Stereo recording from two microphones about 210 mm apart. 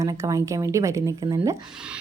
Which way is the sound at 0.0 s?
15° right (ahead or behind).